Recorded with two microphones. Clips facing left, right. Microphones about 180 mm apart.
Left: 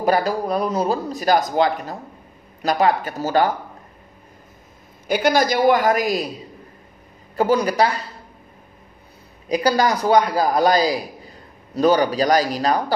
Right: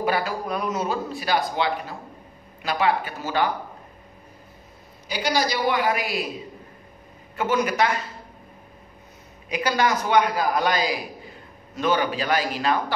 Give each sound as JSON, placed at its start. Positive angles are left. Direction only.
{"t": 0.0, "sound": "a man's voice", "side_deg": 40}
{"t": 5.0, "sound": "a man's voice", "side_deg": 50}
{"t": 7.3, "sound": "a man's voice", "side_deg": 35}
{"t": 9.5, "sound": "a man's voice", "side_deg": 35}